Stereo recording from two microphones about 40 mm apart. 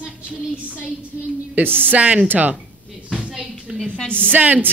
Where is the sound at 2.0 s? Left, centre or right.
Right.